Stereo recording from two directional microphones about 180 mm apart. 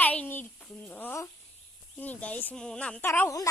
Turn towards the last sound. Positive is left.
turn(degrees=15)  # may be behind; listen again after turning